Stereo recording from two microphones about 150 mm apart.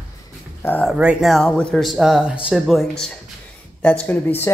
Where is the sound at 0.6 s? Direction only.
10° left (ahead or behind).